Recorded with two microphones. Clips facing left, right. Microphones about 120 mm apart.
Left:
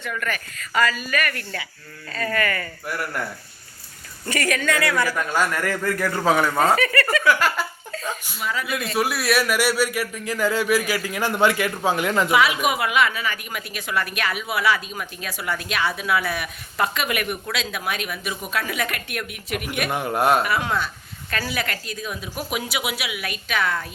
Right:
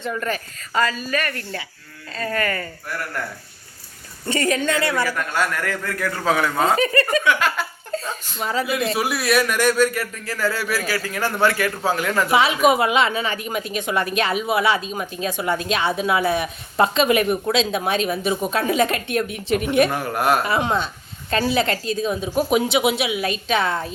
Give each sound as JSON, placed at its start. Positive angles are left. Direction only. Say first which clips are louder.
{"t": 0.0, "sound": "a woman's voice", "louder": "right 3 dB", "side_deg": -30}
{"t": 4.3, "sound": "a woman's voice", "louder": "right 2 dB", "side_deg": -25}
{"t": 5.0, "sound": "speech", "louder": "even", "side_deg": 10}
{"t": 6.7, "sound": "a woman's voice", "louder": "right 2 dB", "side_deg": -25}
{"t": 7.3, "sound": "giggle", "louder": "even", "side_deg": 5}
{"t": 7.9, "sound": "cough", "louder": "right 4 dB", "side_deg": -30}
{"t": 9.0, "sound": "speech", "louder": "left 1 dB", "side_deg": 0}
{"t": 12.3, "sound": "a woman's voice", "louder": "right 6 dB", "side_deg": -25}
{"t": 19.9, "sound": "a man's voice", "louder": "even", "side_deg": 20}
{"t": 20.4, "sound": "a woman's voice", "louder": "right 2 dB", "side_deg": -25}